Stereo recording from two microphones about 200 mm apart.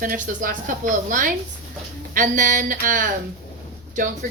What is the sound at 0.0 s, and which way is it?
A woman's voice, 45° right (ahead or behind).